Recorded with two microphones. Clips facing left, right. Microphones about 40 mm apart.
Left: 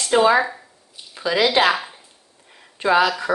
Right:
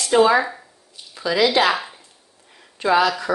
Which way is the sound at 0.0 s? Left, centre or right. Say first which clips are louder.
Even; centre.